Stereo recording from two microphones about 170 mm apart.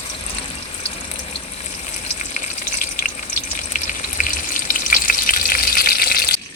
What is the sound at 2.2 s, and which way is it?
Frying, 50° left (ahead or behind).